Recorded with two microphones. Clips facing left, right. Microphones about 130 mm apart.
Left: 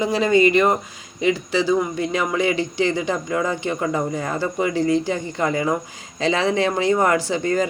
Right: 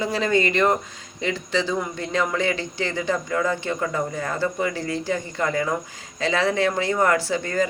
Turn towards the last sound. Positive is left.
turn(degrees=20)  # may be behind; listen again after turning